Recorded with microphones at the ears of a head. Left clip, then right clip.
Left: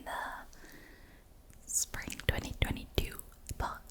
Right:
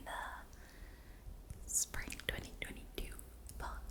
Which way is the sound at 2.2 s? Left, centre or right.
Left.